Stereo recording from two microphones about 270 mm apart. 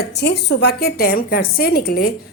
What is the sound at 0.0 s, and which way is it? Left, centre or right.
A woman's voice, left.